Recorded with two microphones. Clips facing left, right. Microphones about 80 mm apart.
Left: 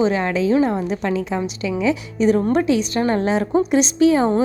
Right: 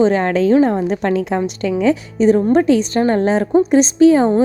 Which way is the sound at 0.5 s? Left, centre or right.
Right.